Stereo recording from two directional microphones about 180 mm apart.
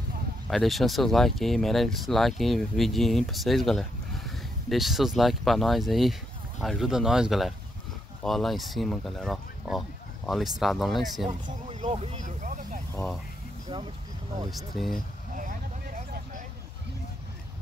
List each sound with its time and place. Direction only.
0.5 s speech: centre (ahead or behind)
11.4 s vehicle: 35° right (ahead or behind)
14.5 s speech: centre (ahead or behind)
15.3 s vehicle: 45° right (ahead or behind)